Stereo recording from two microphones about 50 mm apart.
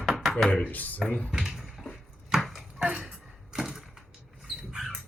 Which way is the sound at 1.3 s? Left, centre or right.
Centre.